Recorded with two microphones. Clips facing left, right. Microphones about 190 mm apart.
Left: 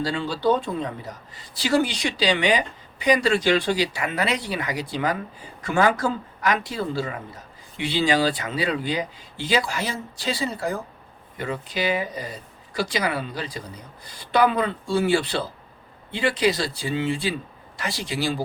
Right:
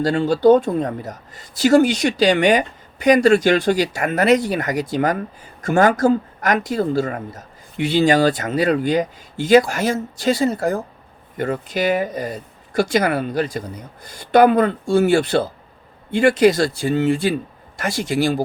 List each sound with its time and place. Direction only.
0.0 s speech: 50° right (ahead or behind)